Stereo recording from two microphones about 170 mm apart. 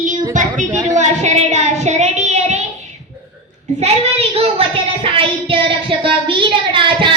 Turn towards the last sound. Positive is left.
turn(degrees=-30)  # may be behind; listen again after turning